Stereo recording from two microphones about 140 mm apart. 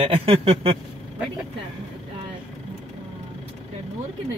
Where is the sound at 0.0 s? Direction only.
45° right (ahead or behind).